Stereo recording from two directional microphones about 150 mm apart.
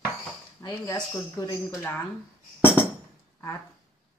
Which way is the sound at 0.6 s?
25° left (ahead or behind).